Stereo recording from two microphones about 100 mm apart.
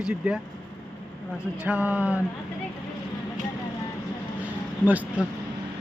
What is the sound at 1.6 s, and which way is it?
Speech, 15° right (ahead or behind).